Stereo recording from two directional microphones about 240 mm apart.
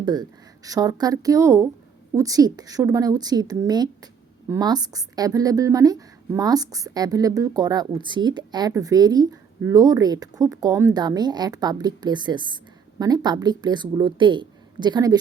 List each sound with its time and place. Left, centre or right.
0.0 s a woman's voice: centre